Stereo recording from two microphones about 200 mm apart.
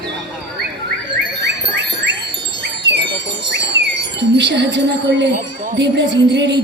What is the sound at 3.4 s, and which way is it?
Wind chime, 60° right (ahead or behind).